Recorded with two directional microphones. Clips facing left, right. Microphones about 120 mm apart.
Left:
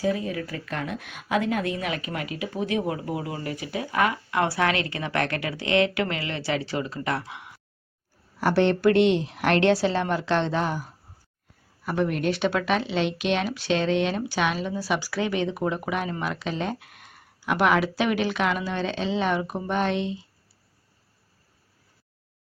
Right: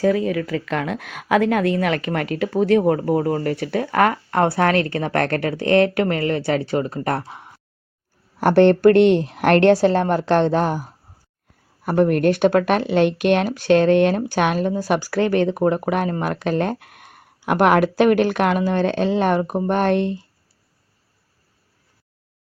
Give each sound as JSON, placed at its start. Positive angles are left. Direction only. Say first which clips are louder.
{"t": 0.0, "sound": "speech", "louder": "right 8 dB", "side_deg": -70}
{"t": 8.4, "sound": "speech", "louder": "right 8 dB", "side_deg": -55}